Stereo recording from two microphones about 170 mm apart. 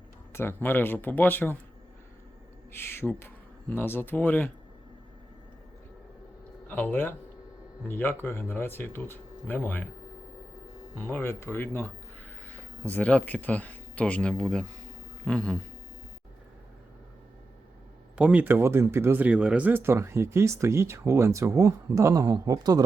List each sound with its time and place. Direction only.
0.3 s speech: 10° left (ahead or behind)
2.7 s speech: 15° left (ahead or behind)
6.7 s speech: 10° left (ahead or behind)
10.9 s speech: 10° left (ahead or behind)
12.9 s speech: 10° left (ahead or behind)
15.2 s a sound: 5° left (ahead or behind)
18.2 s speech: 10° right (ahead or behind)